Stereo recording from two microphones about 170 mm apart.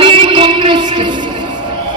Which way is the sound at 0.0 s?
30° right (ahead or behind).